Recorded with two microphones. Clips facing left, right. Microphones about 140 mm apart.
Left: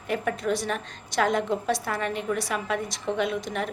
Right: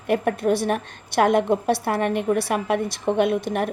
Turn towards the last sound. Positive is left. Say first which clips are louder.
# right 7 dB
turn(degrees=-55)  # may be behind; listen again after turning